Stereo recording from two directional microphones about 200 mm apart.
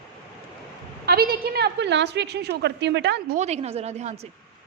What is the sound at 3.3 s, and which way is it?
Speech, 35° right (ahead or behind).